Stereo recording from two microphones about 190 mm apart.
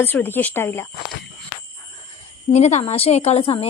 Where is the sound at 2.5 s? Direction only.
35° left (ahead or behind).